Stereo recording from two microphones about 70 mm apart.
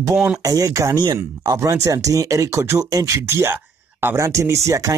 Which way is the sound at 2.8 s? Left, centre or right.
Right.